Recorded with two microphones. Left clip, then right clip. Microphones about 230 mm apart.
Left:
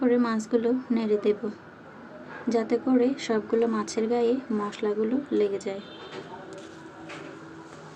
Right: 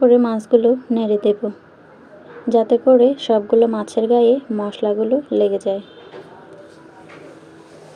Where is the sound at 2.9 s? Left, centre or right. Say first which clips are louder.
Right 14 dB; centre.